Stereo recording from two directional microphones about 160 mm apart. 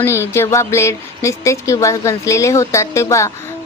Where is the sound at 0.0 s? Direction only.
15° left (ahead or behind).